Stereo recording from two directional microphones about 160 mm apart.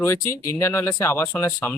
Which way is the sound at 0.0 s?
15° left (ahead or behind).